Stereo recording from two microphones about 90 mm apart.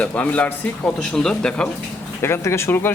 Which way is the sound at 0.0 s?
15° left (ahead or behind).